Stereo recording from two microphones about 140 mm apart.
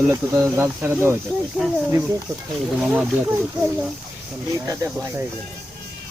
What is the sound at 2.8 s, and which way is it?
Speech, 10° right (ahead or behind).